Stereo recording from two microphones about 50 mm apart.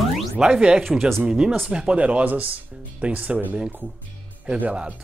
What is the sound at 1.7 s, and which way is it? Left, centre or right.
Speech, centre.